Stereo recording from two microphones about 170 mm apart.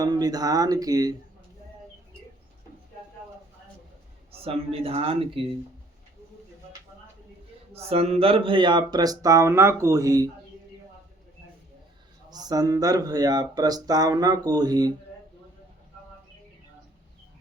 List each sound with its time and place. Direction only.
0.0 s speech: 20° right (ahead or behind)
4.3 s speech: 35° right (ahead or behind)
7.7 s speech: 35° right (ahead or behind); by 10.2 s 20° right (ahead or behind)
12.3 s speech: 25° right (ahead or behind)